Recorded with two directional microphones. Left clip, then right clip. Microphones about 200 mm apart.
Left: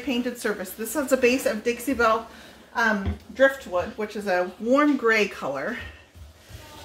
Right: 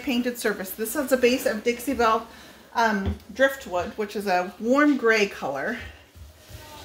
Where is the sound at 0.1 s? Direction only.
30° right (ahead or behind).